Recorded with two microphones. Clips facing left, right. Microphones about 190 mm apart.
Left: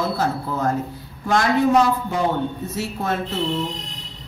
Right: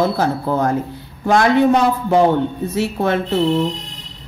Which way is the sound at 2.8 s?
65° right (ahead or behind).